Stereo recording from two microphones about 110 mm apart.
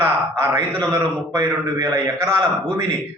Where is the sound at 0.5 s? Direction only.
30° right (ahead or behind).